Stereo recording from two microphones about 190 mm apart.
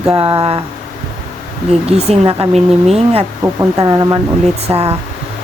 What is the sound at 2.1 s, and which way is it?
Speech, 30° right (ahead or behind).